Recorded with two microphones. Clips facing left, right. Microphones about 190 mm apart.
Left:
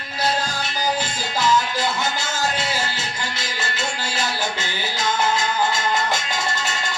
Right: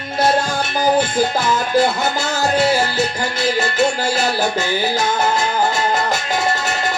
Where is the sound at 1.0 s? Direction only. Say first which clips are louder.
Right 7 dB; 55° right (ahead or behind).